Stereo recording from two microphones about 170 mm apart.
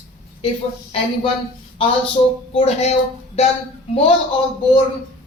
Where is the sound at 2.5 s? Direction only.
40° left (ahead or behind).